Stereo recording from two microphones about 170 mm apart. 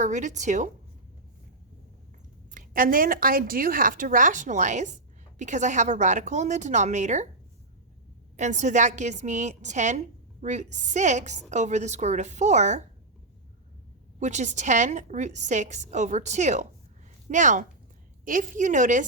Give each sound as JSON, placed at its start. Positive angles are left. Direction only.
{"t": 0.0, "sound": "a woman's voice", "side_deg": -45}
{"t": 2.5, "sound": "a woman's voice", "side_deg": -55}
{"t": 8.4, "sound": "a woman's voice", "side_deg": -45}
{"t": 14.2, "sound": "a woman's voice", "side_deg": -45}